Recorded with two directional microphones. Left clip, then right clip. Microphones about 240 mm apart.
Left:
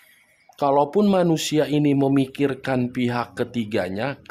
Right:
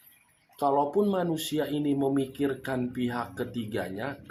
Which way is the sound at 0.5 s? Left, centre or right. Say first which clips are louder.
Left 6 dB; left.